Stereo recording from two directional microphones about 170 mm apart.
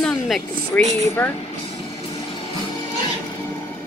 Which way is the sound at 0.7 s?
15° left (ahead or behind).